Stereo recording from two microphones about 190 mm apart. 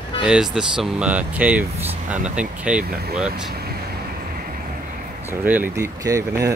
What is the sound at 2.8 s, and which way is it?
Speech, 55° right (ahead or behind).